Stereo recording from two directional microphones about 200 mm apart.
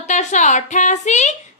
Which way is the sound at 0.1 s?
35° left (ahead or behind).